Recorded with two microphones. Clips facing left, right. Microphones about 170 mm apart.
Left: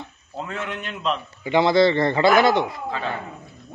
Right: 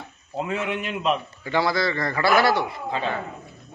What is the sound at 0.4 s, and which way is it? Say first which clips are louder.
Speech: right 4 dB; 5° right (ahead or behind).